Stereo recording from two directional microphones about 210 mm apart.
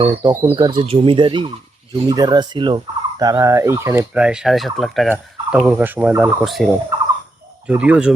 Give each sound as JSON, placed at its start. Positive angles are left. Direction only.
{"t": 0.0, "sound": "speech", "side_deg": -25}
{"t": 2.0, "sound": "turkey", "side_deg": -20}
{"t": 7.7, "sound": "speech", "side_deg": -5}